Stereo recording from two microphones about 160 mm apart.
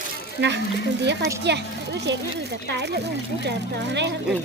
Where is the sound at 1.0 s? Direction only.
90° right.